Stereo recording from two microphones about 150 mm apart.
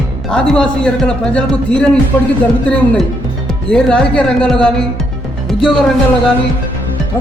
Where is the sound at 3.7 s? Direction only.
5° left (ahead or behind).